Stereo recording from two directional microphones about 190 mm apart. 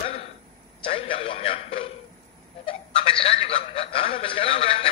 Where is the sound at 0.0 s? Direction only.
35° left (ahead or behind).